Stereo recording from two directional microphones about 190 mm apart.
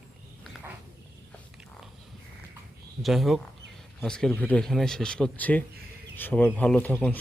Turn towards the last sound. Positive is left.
turn(degrees=10)  # may be behind; listen again after turning